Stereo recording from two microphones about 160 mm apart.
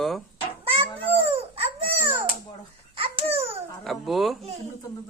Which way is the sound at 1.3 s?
35° right (ahead or behind).